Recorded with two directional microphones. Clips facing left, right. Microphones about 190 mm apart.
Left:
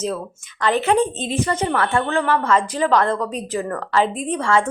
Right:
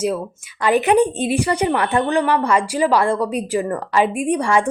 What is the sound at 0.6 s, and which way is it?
A woman's voice, 15° right (ahead or behind).